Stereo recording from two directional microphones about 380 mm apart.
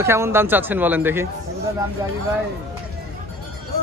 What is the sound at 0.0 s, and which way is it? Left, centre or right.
Speech, centre.